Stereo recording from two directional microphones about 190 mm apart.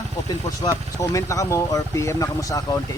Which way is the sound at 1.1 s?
15° left (ahead or behind).